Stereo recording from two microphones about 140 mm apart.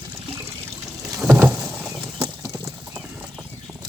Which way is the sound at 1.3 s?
15° right (ahead or behind).